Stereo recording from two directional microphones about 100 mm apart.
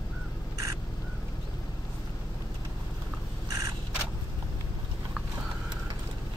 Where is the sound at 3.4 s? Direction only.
35° right (ahead or behind).